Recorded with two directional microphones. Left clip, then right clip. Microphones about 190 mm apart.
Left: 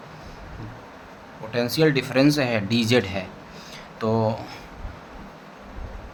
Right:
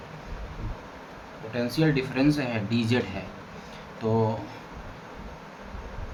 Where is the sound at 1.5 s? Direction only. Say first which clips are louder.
Left 5 dB; 65° left (ahead or behind).